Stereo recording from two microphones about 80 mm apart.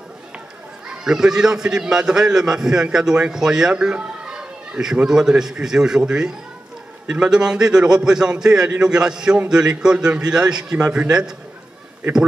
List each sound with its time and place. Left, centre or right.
0.8 s a man's voice: centre